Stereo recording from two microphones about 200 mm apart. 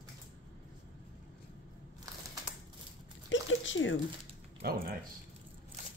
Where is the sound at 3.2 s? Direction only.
70° left (ahead or behind).